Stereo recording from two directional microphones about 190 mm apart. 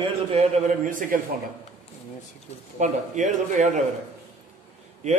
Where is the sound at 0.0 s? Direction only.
30° right (ahead or behind).